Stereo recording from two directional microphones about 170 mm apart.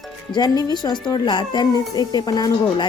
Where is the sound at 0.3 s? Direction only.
25° left (ahead or behind).